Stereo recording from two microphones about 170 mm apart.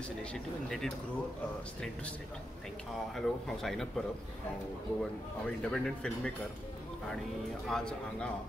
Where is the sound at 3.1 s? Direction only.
Centre (ahead or behind).